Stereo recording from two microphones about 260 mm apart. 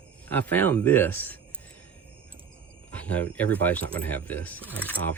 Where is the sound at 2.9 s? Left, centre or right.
Centre.